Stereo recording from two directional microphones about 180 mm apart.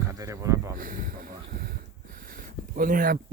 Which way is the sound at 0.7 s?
50° right (ahead or behind).